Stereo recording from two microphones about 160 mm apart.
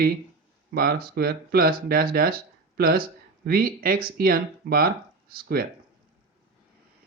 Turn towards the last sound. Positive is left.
turn(degrees=-70)  # may be behind; listen again after turning